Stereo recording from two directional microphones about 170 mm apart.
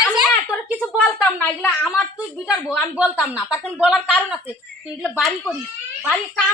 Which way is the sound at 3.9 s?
5° left (ahead or behind).